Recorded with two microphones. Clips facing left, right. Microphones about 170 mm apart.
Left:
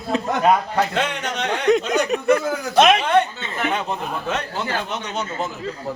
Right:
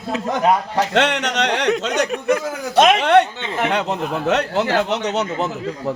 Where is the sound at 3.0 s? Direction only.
75° right (ahead or behind).